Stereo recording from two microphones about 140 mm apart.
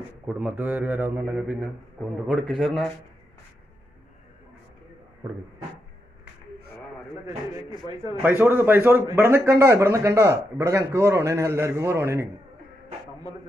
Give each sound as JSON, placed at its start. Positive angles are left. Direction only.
{"t": 0.3, "sound": "a man's voice", "side_deg": -10}
{"t": 8.2, "sound": "speech", "side_deg": -15}